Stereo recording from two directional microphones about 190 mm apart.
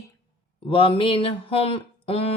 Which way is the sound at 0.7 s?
30° left (ahead or behind).